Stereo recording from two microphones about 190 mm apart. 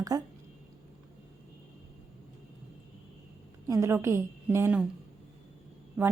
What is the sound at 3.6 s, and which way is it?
A woman's voice, 15° right (ahead or behind).